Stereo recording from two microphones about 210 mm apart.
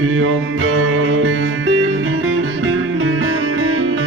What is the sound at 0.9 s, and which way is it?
Music, 75° right (ahead or behind).